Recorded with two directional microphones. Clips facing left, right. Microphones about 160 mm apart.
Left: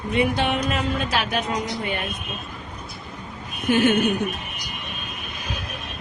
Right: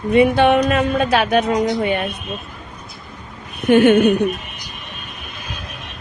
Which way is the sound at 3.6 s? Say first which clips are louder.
Right 7 dB; 65° right (ahead or behind).